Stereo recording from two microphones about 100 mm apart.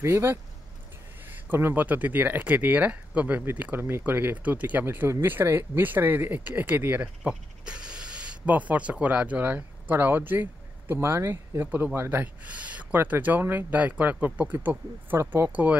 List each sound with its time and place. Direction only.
0.0 s speech: 25° right (ahead or behind)